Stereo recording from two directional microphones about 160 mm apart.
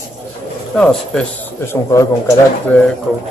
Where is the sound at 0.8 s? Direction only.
5° left (ahead or behind).